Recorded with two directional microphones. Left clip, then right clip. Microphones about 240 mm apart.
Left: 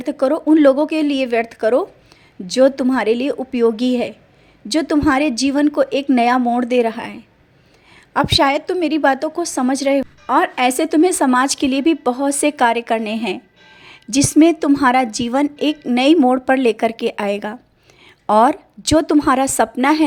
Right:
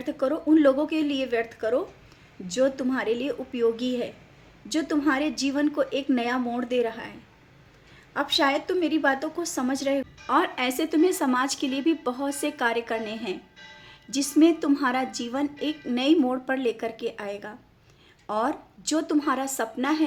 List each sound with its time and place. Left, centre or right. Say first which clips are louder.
0.0 s a woman's voice: left 9 dB; left